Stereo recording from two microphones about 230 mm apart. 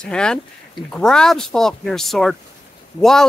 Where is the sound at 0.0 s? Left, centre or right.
Centre.